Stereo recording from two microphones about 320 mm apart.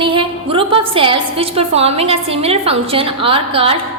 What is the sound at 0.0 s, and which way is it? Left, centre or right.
A woman's voice, centre.